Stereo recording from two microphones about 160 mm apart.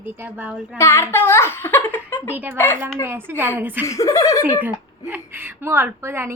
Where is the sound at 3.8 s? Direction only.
20° left (ahead or behind).